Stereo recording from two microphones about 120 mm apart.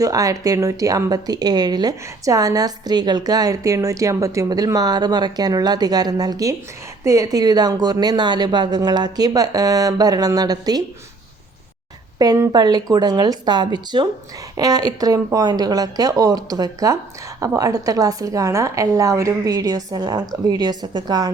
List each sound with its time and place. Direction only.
0.0 s speech: 30° right (ahead or behind)
12.2 s a woman's voice: 30° right (ahead or behind)